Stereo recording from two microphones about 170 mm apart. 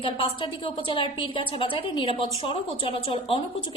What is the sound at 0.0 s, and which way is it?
A woman's voice, 30° left (ahead or behind).